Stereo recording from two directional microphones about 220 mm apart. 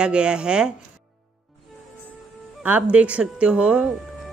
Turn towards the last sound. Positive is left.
turn(degrees=-5)  # may be behind; listen again after turning